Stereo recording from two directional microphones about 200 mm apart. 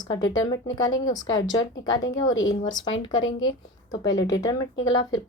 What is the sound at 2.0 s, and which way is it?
A woman's voice, 75° left (ahead or behind).